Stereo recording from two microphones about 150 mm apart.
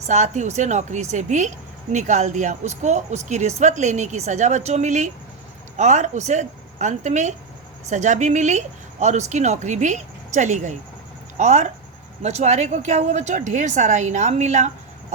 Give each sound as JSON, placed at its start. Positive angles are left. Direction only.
{"t": 0.1, "sound": "speech", "side_deg": -50}